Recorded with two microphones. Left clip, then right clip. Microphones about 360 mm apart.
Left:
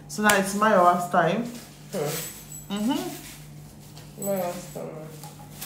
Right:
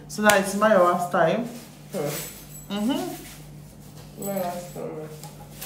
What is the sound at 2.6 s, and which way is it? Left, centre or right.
Speech, centre.